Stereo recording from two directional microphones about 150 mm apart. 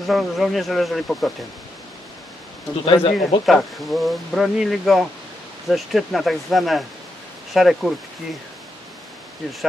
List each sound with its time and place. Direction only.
0.0 s speech: centre (ahead or behind)
2.8 s speech: 35° left (ahead or behind)
3.4 s speech: centre (ahead or behind)